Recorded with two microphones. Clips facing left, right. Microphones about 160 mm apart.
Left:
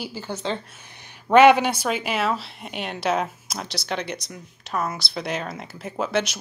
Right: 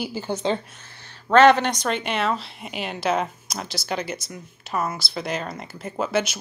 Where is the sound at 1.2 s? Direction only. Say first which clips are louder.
Left 1 dB; 10° left (ahead or behind).